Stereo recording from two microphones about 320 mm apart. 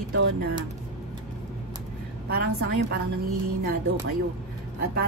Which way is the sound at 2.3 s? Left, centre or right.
Right.